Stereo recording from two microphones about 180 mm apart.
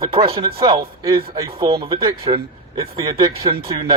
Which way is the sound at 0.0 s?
30° right (ahead or behind).